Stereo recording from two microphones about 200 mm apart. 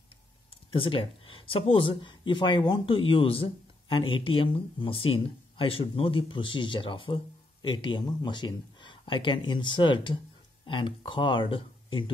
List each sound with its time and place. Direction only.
0.7 s speech: 25° left (ahead or behind)